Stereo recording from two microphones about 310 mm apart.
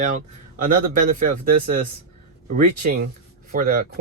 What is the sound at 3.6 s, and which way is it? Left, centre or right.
Speech, right.